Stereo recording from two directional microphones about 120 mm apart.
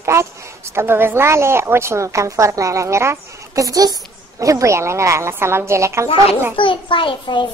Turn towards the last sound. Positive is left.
turn(degrees=45)  # may be behind; listen again after turning